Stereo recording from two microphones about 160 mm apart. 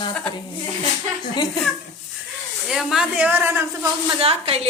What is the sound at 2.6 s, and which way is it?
Speech, 5° right (ahead or behind).